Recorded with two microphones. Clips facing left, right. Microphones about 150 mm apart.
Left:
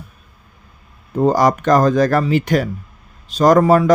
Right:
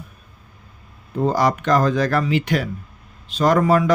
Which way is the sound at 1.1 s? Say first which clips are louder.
Left 5 dB; 40° left (ahead or behind).